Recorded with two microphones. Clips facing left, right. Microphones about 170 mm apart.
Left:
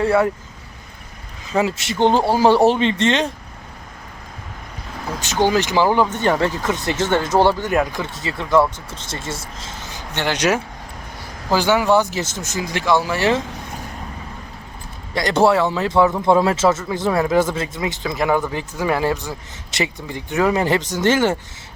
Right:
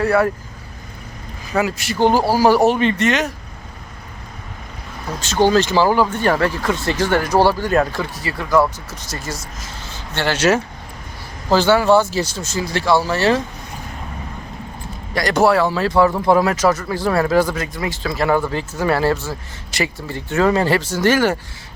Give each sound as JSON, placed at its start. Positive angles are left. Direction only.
{"t": 0.0, "sound": "speech", "side_deg": 20}
{"t": 1.5, "sound": "speech", "side_deg": 25}
{"t": 5.2, "sound": "speech", "side_deg": 15}
{"t": 15.1, "sound": "speech", "side_deg": 25}